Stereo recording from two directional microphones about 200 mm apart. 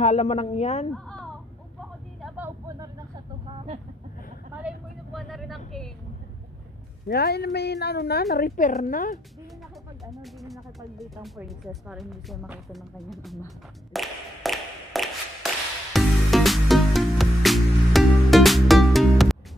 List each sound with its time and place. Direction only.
0.0 s speech: 35° left (ahead or behind)
0.9 s a sound: 5° left (ahead or behind)
2.2 s vehicle: 5° right (ahead or behind)
2.8 s vehicle: 20° right (ahead or behind)
4.6 s vehicle: 5° right (ahead or behind)
7.1 s a woman's voice: 50° left (ahead or behind)
11.2 s speech: centre (ahead or behind)
13.9 s a sound: centre (ahead or behind)
15.4 s music: centre (ahead or behind)